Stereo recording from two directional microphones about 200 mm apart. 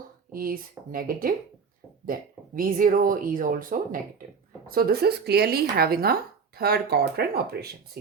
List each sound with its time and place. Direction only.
0.3 s speech: 45° right (ahead or behind)
2.6 s speech: 45° right (ahead or behind)